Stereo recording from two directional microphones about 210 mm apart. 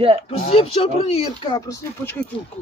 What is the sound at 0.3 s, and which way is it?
Speech, 30° left (ahead or behind).